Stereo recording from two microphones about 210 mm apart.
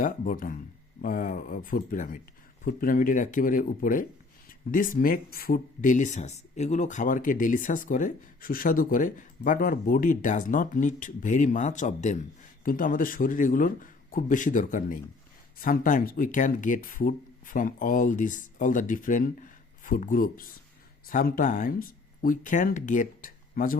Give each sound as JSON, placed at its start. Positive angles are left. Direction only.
{"t": 0.0, "sound": "speech", "side_deg": 40}